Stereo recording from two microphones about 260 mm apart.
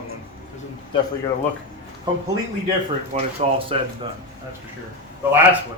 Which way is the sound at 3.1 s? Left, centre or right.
Right.